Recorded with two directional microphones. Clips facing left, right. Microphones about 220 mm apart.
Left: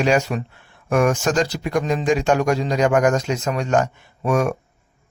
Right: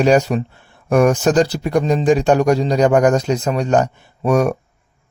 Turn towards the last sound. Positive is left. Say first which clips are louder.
# right 4 dB
turn(degrees=-35)  # may be behind; listen again after turning